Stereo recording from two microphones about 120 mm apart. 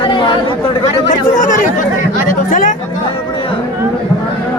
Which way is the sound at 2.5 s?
90° left.